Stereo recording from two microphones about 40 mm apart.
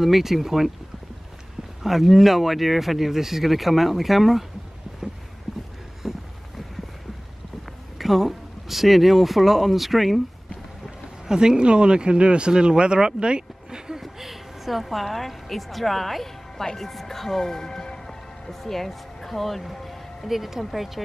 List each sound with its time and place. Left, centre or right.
0.0 s speech: centre
1.8 s speech: centre
6.0 s boat: centre
8.0 s speech: centre
11.2 s speech: centre
14.0 s a woman's voice: centre
20.2 s speech: centre